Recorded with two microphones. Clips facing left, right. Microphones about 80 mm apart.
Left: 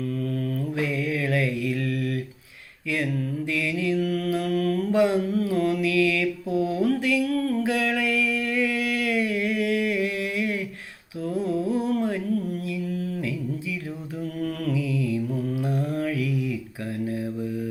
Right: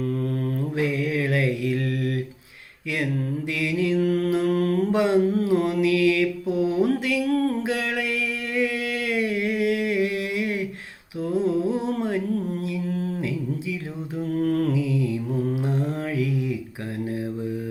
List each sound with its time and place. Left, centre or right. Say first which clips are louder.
0.0 s mantra: right 2 dB; right
0.8 s mantra: right 3 dB; right
3.5 s mantra: right 2 dB; right
5.2 s mantra: right 3 dB; right
7.3 s a sound: right 2 dB; right
7.6 s a sound: left 2 dB; right
14.3 s mantra: right 6 dB; right